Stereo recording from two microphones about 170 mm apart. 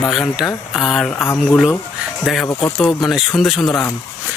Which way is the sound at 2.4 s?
15° left (ahead or behind).